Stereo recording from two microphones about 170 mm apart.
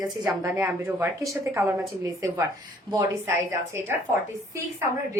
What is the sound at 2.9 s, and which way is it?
A woman's voice, 25° right (ahead or behind).